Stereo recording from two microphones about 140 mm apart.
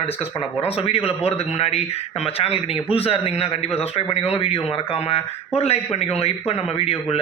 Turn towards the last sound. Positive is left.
turn(degrees=45)  # may be behind; listen again after turning